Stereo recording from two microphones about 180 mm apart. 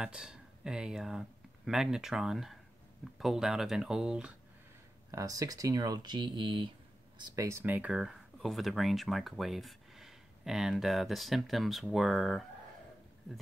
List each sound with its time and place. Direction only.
0.0 s speech: 5° right (ahead or behind)
5.1 s speech: 20° right (ahead or behind)
7.3 s speech: 15° right (ahead or behind)